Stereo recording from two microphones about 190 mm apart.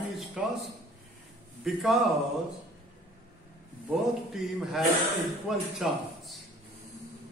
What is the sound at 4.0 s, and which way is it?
A man's voice, centre (ahead or behind).